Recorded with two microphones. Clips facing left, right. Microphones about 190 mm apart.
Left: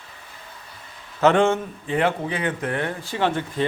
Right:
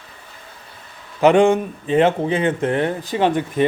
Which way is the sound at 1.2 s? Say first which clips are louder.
Right 4 dB; 15° right (ahead or behind).